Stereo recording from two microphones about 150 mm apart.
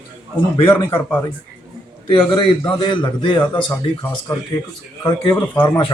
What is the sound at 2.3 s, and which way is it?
A man's voice, 35° left (ahead or behind).